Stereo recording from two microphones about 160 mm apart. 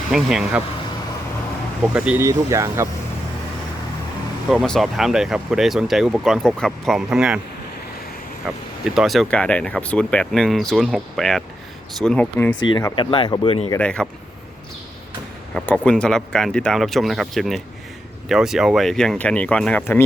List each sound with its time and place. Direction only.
0.1 s speech: 5° right (ahead or behind)
1.9 s speech: 5° right (ahead or behind)
4.4 s speech: centre (ahead or behind)
8.5 s speech: centre (ahead or behind)
12.6 s speech: 30° left (ahead or behind)
13.7 s speech: 5° left (ahead or behind)
15.5 s speech: 5° left (ahead or behind)